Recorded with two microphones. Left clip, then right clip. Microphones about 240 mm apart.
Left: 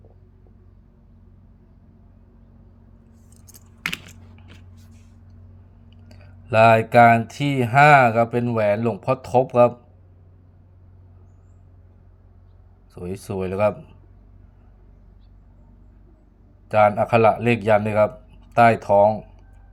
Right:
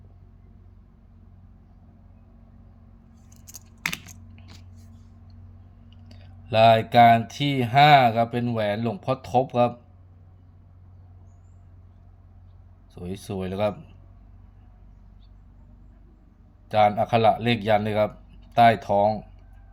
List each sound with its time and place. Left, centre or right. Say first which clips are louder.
3.5 s computer keyboard: left 2 dB; right
6.1 s speech: left 3 dB; centre
12.9 s speech: left 4 dB; centre
16.7 s speech: left 4 dB; centre